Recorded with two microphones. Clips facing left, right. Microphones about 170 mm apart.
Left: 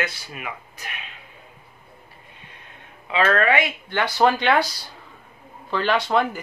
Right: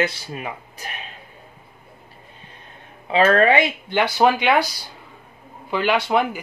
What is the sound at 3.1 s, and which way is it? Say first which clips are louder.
Speech: right 4 dB; 35° right (ahead or behind).